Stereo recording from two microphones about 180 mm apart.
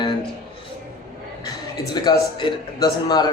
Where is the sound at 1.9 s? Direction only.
25° left (ahead or behind).